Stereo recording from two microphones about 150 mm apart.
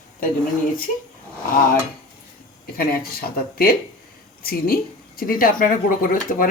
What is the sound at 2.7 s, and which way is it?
Speech, 80° left.